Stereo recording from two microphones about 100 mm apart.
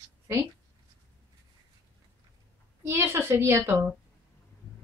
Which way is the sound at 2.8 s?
25° right (ahead or behind).